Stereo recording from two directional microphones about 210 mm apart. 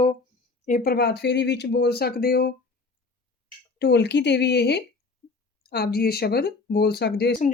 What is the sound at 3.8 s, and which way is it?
Speech, 55° left (ahead or behind).